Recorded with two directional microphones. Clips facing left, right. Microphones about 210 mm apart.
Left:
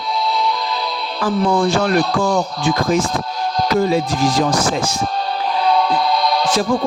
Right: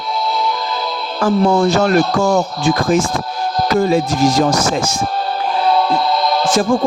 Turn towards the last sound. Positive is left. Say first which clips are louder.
# right 3 dB
turn(degrees=-45)  # may be behind; listen again after turning